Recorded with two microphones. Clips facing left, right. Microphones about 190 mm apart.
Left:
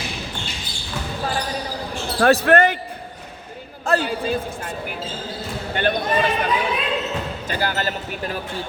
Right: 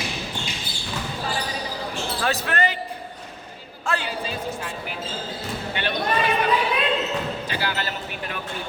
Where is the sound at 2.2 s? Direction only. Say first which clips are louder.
Left 10 dB; 55° left (ahead or behind).